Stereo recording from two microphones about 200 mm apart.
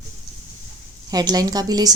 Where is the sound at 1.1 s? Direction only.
20° right (ahead or behind).